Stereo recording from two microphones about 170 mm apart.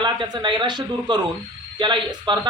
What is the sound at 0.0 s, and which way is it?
A man's voice, 25° right (ahead or behind).